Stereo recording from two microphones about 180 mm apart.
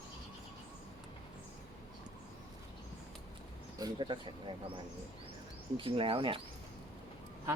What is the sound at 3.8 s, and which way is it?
Speech, 25° right (ahead or behind).